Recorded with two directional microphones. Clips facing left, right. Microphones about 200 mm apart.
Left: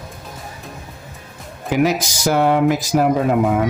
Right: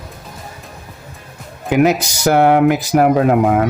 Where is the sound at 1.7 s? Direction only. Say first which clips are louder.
Right 4 dB; 60° right (ahead or behind).